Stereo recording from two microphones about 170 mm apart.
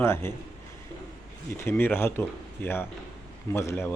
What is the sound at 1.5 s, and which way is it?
Speech, 15° left (ahead or behind).